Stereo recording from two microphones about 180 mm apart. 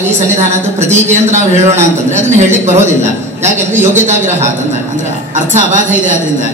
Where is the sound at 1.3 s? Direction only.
40° right (ahead or behind).